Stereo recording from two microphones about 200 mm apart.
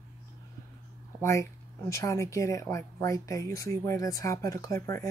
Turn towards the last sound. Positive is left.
turn(degrees=15)  # may be behind; listen again after turning